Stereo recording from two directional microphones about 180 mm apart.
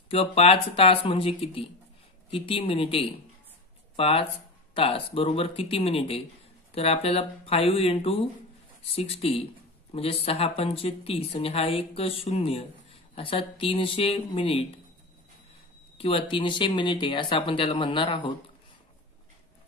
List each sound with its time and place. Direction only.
0.1 s speech: 35° left (ahead or behind)
16.0 s speech: 30° left (ahead or behind)